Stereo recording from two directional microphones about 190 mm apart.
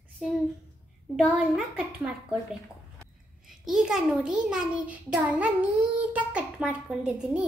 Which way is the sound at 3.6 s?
Centre (ahead or behind).